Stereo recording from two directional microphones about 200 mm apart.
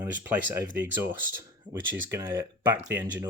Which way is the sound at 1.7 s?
15° right (ahead or behind).